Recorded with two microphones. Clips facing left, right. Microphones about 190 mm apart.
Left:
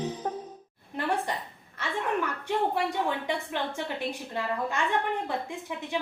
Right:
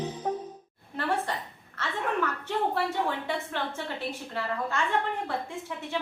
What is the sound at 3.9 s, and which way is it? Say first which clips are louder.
A woman's voice: left 1 dB; 15° left (ahead or behind).